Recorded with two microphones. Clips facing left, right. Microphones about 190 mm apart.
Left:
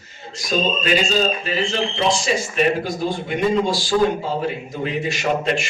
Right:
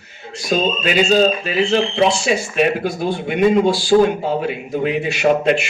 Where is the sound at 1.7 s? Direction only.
60° right (ahead or behind).